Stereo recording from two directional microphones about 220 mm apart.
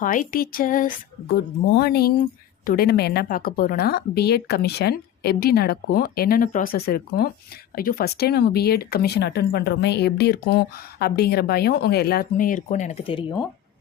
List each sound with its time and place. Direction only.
0.0 s speech: 35° left (ahead or behind)